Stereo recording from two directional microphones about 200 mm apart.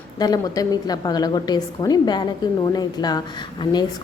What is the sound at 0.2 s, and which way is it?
A woman's voice, 20° left (ahead or behind).